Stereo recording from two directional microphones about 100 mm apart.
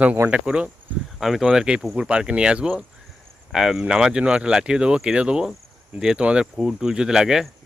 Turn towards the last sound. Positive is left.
turn(degrees=-5)  # may be behind; listen again after turning